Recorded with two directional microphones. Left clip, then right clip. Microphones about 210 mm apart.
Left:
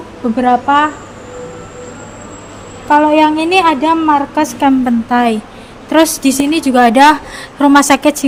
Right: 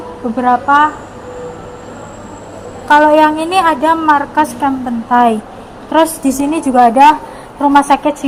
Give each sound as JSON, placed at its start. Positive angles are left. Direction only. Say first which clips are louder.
{"t": 0.3, "sound": "a woman's voice", "louder": "right 1 dB", "side_deg": 40}
{"t": 2.9, "sound": "a woman's voice", "louder": "right 1 dB", "side_deg": 25}
{"t": 4.6, "sound": "a woman's voice", "louder": "left 4 dB", "side_deg": 45}
{"t": 5.1, "sound": "a woman's voice", "louder": "right 4 dB", "side_deg": 25}
{"t": 5.9, "sound": "a woman's voice", "louder": "left 1 dB", "side_deg": 35}